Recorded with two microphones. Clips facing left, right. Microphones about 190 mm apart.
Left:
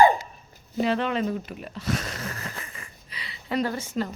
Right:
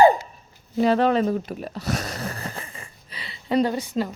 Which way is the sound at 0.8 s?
40° right (ahead or behind).